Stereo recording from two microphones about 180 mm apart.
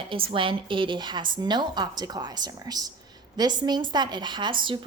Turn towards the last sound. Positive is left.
turn(degrees=-25)  # may be behind; listen again after turning